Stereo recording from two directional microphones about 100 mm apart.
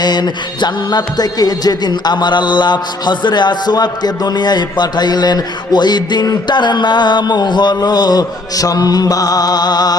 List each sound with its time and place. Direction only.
0.0 s music: 45° left (ahead or behind)